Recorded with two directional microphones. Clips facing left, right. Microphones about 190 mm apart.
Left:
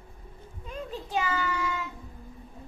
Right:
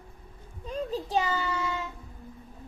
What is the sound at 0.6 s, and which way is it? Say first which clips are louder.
Child singing: right 5 dB; 35° right (ahead or behind).